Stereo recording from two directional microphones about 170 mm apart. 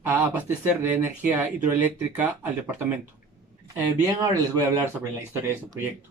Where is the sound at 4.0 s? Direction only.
15° right (ahead or behind).